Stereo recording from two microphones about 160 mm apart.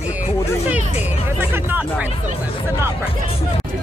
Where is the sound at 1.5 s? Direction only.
10° right (ahead or behind).